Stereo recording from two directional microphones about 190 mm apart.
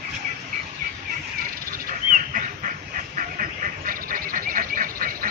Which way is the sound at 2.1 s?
45° right (ahead or behind).